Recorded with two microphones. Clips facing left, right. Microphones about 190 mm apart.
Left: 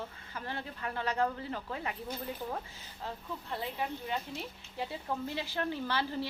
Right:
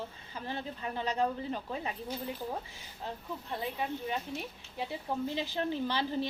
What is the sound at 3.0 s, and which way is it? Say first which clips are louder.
A woman's voice: right 1 dB; 20° right (ahead or behind).